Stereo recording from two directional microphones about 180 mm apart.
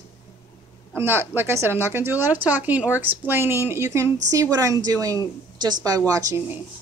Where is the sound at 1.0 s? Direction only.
10° right (ahead or behind).